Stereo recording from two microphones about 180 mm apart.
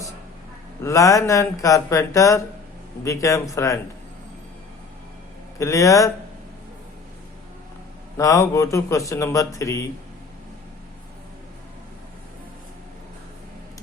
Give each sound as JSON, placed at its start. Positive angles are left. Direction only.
{"t": 0.8, "sound": "speech", "side_deg": 15}
{"t": 5.5, "sound": "speech", "side_deg": 15}
{"t": 8.2, "sound": "speech", "side_deg": 20}